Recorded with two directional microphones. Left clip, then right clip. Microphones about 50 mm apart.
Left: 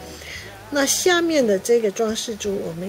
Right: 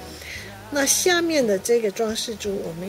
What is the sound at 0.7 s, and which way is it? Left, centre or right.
Speech, centre.